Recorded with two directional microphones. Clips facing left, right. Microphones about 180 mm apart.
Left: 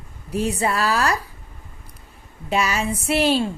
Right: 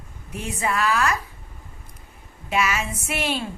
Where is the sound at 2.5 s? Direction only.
30° left (ahead or behind).